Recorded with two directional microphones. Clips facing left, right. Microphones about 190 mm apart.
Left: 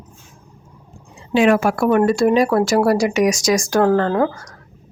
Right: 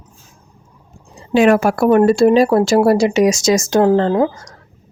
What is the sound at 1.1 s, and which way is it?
Speech, 45° right (ahead or behind).